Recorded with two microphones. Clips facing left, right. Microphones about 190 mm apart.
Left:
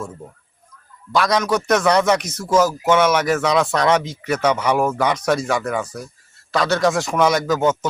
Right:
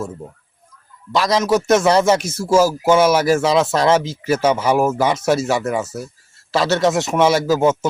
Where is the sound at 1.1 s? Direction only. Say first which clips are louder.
Right 2 dB; 25° right (ahead or behind).